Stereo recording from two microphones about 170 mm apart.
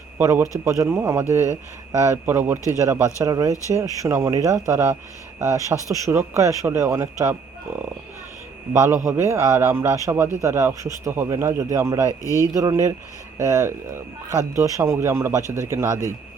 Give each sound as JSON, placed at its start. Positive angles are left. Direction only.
{"t": 0.2, "sound": "speech", "side_deg": -15}
{"t": 8.7, "sound": "speech", "side_deg": -15}
{"t": 12.2, "sound": "speech", "side_deg": 20}
{"t": 12.5, "sound": "speech", "side_deg": -20}